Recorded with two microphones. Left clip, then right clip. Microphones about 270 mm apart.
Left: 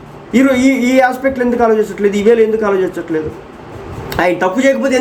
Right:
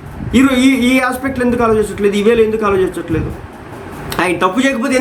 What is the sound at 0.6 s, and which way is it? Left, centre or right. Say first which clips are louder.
A man's voice: left 2 dB; centre.